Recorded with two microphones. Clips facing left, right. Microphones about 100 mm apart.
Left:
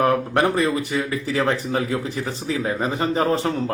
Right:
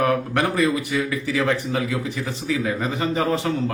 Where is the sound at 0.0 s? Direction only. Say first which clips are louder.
Left 2 dB; 30° left (ahead or behind).